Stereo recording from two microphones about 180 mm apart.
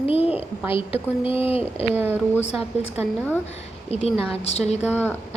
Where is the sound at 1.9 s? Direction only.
10° right (ahead or behind).